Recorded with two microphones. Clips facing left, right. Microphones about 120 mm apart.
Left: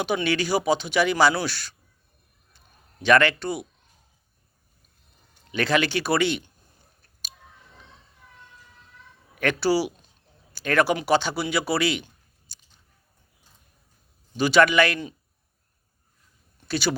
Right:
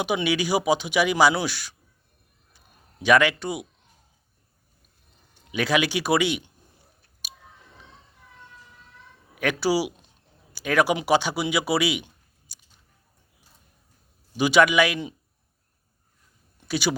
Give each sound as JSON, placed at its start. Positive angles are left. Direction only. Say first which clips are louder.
{"t": 0.0, "sound": "speech", "louder": "even", "side_deg": -15}
{"t": 3.0, "sound": "speech", "louder": "even", "side_deg": -10}
{"t": 5.5, "sound": "speech", "louder": "even", "side_deg": -10}
{"t": 9.3, "sound": "speech", "louder": "left 1 dB", "side_deg": -10}
{"t": 14.3, "sound": "speech", "louder": "even", "side_deg": -15}
{"t": 16.6, "sound": "a sound", "louder": "even", "side_deg": -10}